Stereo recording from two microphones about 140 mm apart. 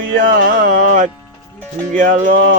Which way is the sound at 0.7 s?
65° right (ahead or behind).